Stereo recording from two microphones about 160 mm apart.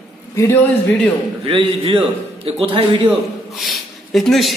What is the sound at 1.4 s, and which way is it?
A man's voice, 35° right (ahead or behind).